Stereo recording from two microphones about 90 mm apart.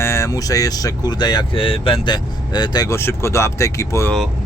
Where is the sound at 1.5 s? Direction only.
90° left.